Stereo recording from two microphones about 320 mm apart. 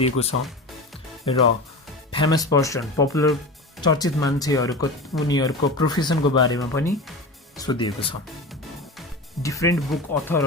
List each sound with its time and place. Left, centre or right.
0.0 s speech: centre
2.1 s speech: centre
9.4 s speech: centre